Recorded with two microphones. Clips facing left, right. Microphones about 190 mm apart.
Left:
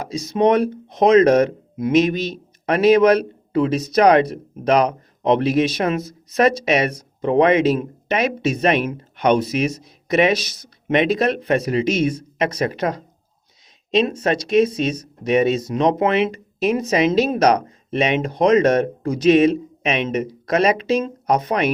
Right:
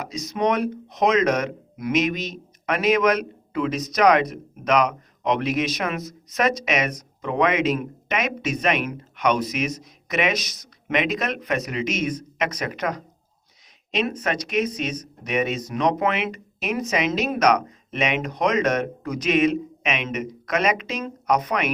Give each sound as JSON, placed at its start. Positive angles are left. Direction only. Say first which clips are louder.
{"t": 0.0, "sound": "speech", "louder": "left 6 dB", "side_deg": 30}